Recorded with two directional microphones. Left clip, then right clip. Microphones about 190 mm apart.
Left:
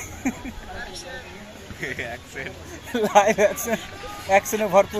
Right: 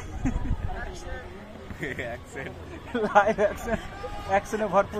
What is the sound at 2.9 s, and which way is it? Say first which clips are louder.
Speech: left 4 dB; 55° left (ahead or behind).